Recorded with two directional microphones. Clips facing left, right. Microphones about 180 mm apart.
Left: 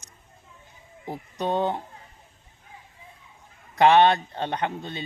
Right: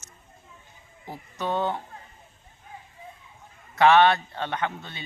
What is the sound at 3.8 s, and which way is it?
Speech, 35° left (ahead or behind).